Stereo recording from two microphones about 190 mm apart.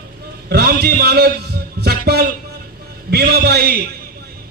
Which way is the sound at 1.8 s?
55° right (ahead or behind).